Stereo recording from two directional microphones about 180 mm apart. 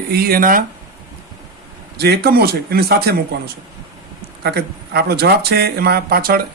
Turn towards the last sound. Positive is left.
turn(degrees=-55)  # may be behind; listen again after turning